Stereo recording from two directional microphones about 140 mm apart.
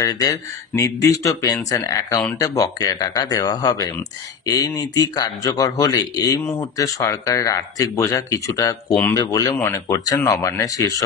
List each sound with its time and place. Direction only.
0.0 s speech: 25° left (ahead or behind)
8.9 s speech: 10° left (ahead or behind)
9.3 s speech: 25° left (ahead or behind)